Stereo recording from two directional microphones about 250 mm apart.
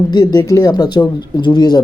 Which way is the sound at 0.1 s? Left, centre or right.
Centre.